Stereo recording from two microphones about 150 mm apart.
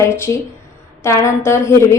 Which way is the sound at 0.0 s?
20° left (ahead or behind).